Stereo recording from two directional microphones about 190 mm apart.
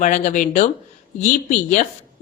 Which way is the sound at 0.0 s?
40° left (ahead or behind).